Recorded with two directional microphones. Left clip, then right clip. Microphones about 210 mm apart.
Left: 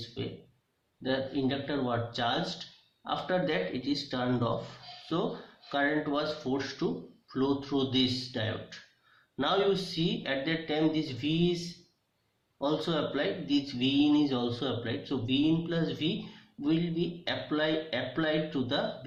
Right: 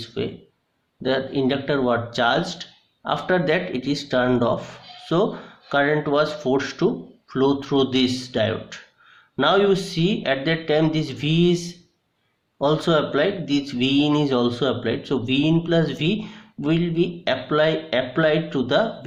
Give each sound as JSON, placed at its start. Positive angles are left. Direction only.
{"t": 0.2, "sound": "speech", "side_deg": -50}